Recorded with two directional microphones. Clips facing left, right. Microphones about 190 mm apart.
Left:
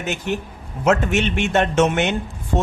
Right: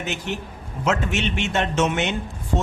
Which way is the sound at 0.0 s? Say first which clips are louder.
Left 4 dB; 50° left (ahead or behind).